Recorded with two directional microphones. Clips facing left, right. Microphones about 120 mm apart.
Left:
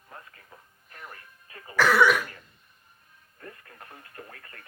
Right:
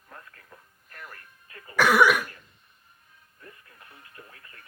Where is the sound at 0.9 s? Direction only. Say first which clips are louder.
Even; 25° left (ahead or behind).